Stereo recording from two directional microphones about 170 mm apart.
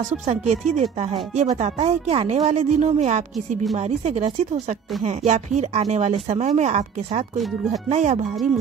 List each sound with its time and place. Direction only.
0.3 s speech: 45° right (ahead or behind)